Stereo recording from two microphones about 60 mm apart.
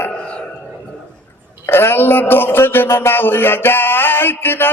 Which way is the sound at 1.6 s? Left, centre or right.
Left.